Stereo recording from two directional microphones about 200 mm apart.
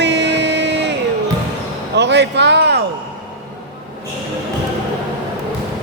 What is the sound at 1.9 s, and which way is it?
Speech, 60° right (ahead or behind).